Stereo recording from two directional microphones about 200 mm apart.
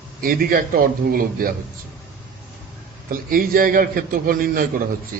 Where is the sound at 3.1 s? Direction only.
45° right (ahead or behind).